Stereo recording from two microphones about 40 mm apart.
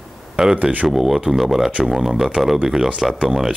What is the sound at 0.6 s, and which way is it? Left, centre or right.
Speech, right.